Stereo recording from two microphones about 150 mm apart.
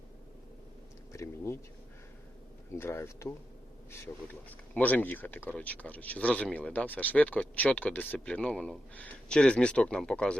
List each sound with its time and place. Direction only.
1.1 s speech: 20° left (ahead or behind)
2.7 s speech: 15° left (ahead or behind)
4.7 s speech: 10° left (ahead or behind)